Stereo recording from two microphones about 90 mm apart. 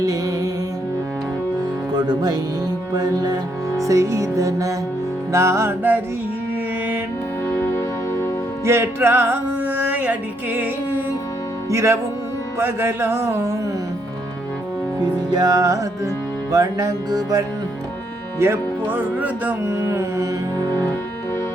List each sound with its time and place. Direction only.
0.0 s music: 40° right (ahead or behind)
1.9 s music: 50° right (ahead or behind); by 5.7 s 30° right (ahead or behind)
7.4 s music: 25° left (ahead or behind)
8.6 s music: 30° right (ahead or behind)
11.7 s music: 30° right (ahead or behind)
15.3 s music: 45° right (ahead or behind)
18.3 s music: 30° right (ahead or behind)